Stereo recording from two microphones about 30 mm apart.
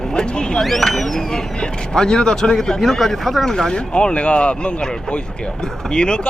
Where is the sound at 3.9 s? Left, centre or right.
Left.